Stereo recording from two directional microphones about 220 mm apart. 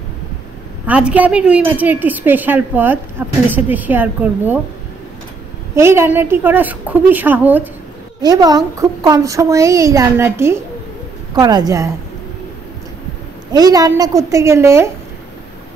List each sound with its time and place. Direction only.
0.8 s a woman's voice: 5° right (ahead or behind)
5.8 s a woman's voice: 10° right (ahead or behind)
13.5 s a woman's voice: 15° right (ahead or behind)